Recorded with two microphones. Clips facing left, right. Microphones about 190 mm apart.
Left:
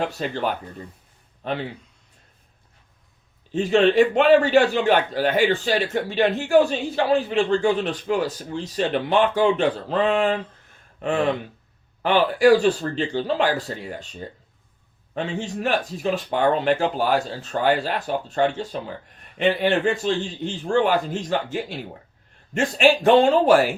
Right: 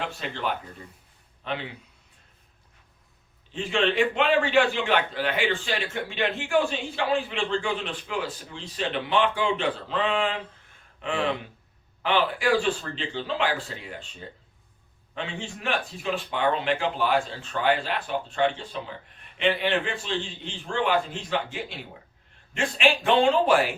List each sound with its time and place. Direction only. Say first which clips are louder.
0.0 s a man's voice: left 6 dB; 40° left (ahead or behind)
3.5 s a man's voice: left 8 dB; 40° left (ahead or behind)